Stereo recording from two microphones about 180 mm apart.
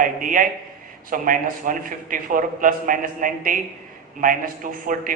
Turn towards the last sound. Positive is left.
turn(degrees=-50)  # may be behind; listen again after turning